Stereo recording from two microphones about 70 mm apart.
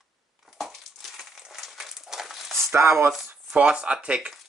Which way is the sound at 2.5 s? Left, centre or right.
Right.